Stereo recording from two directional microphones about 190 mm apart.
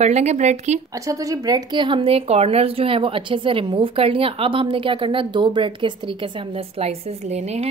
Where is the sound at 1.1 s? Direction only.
20° right (ahead or behind); by 7.7 s 35° right (ahead or behind).